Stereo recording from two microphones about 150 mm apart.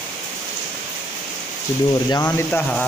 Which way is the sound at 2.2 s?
15° left (ahead or behind).